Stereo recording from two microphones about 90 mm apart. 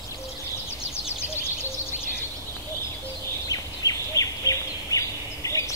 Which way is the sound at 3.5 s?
40° left (ahead or behind).